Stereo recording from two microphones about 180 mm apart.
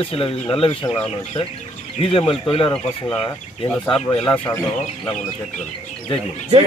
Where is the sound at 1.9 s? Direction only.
30° left (ahead or behind).